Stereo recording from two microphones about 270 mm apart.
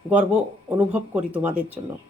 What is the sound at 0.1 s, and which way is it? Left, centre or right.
Speech, centre.